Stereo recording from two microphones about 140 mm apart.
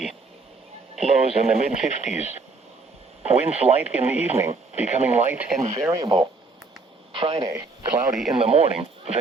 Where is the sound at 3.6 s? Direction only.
20° right (ahead or behind).